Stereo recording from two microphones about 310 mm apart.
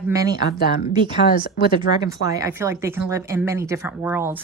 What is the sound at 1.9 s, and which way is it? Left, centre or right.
Speech, left.